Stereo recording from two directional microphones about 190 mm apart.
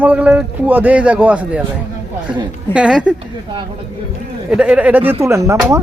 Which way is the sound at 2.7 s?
5° right (ahead or behind).